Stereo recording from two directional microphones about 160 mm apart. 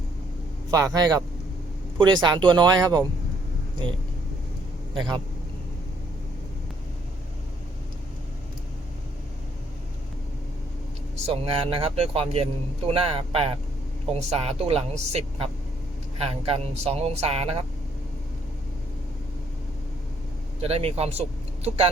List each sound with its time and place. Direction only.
0.7 s speech: 20° right (ahead or behind)
4.9 s speech: 30° right (ahead or behind)
11.3 s a man's voice: 35° right (ahead or behind)
20.6 s speech: 40° right (ahead or behind)